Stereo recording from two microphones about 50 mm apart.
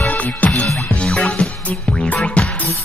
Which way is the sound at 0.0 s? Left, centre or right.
Left.